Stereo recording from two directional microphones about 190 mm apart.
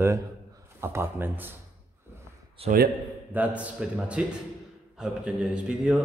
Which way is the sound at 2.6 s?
30° right (ahead or behind).